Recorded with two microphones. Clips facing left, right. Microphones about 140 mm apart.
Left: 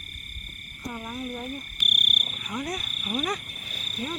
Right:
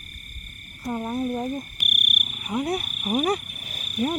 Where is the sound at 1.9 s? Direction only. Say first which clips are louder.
Right 1 dB; 25° left (ahead or behind).